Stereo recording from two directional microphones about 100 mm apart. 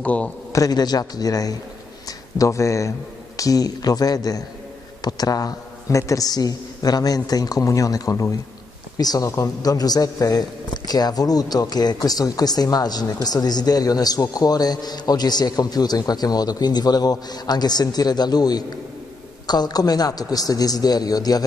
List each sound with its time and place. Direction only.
0.0 s a man's voice: 15° left (ahead or behind)
0.5 s a man's voice: 35° left (ahead or behind)